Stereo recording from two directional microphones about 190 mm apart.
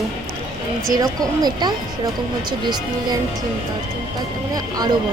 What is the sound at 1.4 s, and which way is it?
Speech, 20° right (ahead or behind).